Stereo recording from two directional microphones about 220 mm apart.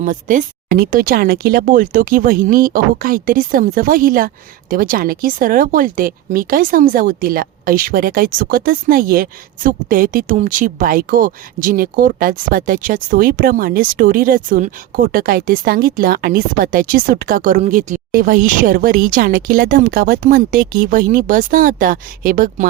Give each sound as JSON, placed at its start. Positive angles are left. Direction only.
{"t": 0.0, "sound": "speech", "side_deg": -35}